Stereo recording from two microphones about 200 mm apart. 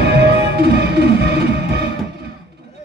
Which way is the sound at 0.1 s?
55° right (ahead or behind).